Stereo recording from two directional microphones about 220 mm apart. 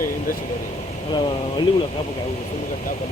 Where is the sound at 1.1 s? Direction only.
20° left (ahead or behind).